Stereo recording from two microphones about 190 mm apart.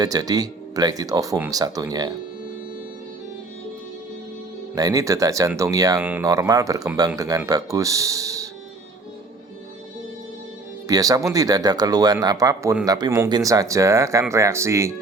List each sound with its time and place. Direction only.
0.0 s speech: 20° right (ahead or behind)
4.7 s speech: 20° right (ahead or behind)
10.8 s speech: 20° right (ahead or behind)